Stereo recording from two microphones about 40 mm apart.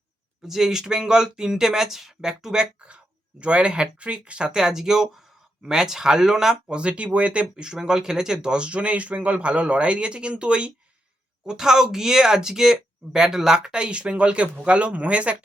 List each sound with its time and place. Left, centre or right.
0.4 s speech: centre
2.7 s speech: right
4.5 s speech: centre
6.7 s speech: right
7.5 s speech: centre
11.4 s speech: centre; by 15.4 s right